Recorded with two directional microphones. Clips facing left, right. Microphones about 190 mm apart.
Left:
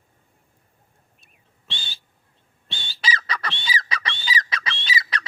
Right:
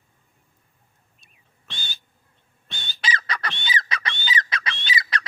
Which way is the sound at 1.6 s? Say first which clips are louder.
Left 1 dB; 30° left (ahead or behind).